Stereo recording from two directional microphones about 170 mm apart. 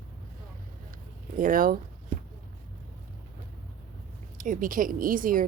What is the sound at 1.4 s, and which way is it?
Speech, 55° right (ahead or behind).